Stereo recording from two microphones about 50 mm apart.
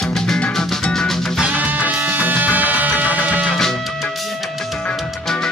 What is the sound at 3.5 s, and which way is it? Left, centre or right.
Music, centre.